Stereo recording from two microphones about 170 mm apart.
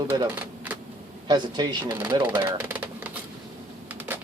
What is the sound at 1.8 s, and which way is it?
Speech, 10° right (ahead or behind).